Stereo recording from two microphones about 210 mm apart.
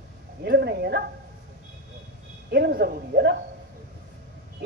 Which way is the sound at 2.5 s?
50° right (ahead or behind).